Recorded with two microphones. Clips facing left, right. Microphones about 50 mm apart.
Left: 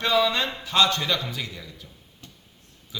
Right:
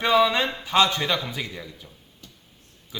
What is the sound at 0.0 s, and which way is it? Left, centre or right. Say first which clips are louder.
Speech: right 3 dB; centre.